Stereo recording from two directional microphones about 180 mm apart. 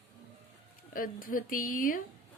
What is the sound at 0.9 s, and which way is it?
A woman's voice, 50° left (ahead or behind).